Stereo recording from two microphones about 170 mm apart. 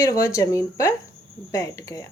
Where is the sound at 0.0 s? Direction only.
20° left (ahead or behind).